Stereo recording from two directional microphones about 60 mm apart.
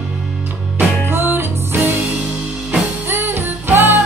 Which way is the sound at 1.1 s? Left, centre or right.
Right.